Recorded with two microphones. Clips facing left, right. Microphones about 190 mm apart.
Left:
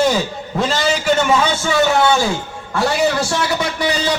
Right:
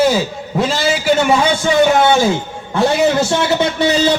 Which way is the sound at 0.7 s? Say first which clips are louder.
Right 1 dB; 5° right (ahead or behind).